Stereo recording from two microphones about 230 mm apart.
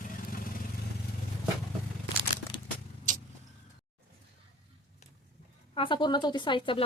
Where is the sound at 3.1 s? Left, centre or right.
Right.